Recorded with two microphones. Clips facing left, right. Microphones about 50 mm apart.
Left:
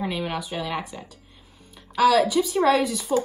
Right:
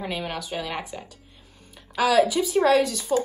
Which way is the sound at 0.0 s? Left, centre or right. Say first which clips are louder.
Left 2 dB; centre.